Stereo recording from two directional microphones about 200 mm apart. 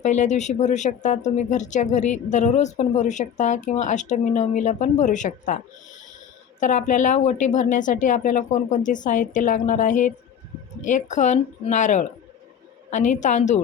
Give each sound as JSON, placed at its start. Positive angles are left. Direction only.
{"t": 0.0, "sound": "speech", "side_deg": 35}
{"t": 6.6, "sound": "speech", "side_deg": 40}